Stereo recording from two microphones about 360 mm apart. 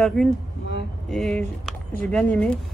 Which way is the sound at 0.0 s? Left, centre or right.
Centre.